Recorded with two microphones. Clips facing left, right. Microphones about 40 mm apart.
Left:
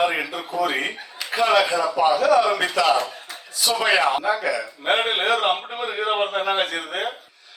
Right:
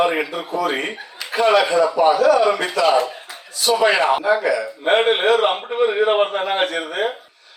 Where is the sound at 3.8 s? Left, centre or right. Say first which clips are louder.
Right 3 dB; right.